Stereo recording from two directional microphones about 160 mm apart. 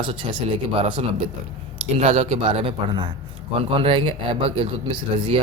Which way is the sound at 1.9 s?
45° right (ahead or behind).